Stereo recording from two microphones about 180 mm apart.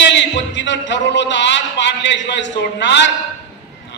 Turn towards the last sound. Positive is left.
turn(degrees=75)  # may be behind; listen again after turning